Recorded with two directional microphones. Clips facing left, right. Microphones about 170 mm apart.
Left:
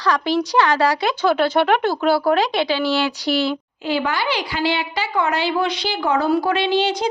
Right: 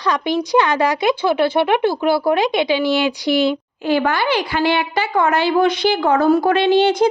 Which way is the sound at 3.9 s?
50° right (ahead or behind).